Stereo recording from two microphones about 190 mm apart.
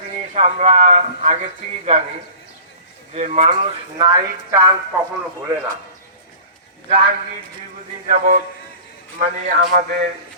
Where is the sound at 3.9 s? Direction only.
20° right (ahead or behind).